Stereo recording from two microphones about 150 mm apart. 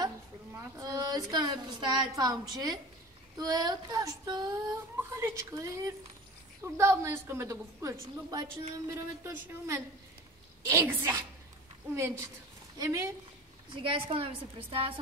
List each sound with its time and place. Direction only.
0.0 s a woman's voice: 20° right (ahead or behind)
3.3 s child singing: 25° right (ahead or behind)
6.6 s a woman's voice: 20° right (ahead or behind)
12.7 s child singing: 20° right (ahead or behind)
13.8 s a woman's voice: 35° right (ahead or behind)